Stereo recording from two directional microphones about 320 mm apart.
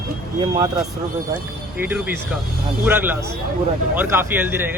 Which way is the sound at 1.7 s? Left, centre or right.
Centre.